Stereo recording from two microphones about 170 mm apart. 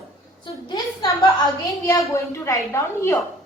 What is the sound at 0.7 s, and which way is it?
A woman's voice, 20° left (ahead or behind).